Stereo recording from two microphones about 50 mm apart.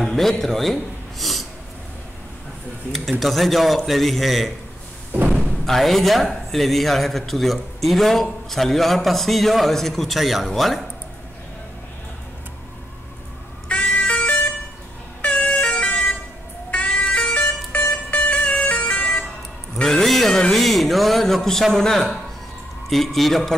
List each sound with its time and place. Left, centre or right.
0.0 s speech: centre
2.9 s speech: centre
5.7 s speech: centre
13.7 s vehicle: left
15.2 s emergency vehicle: left
16.7 s music: left
19.8 s a sound: centre
21.7 s a man's voice: centre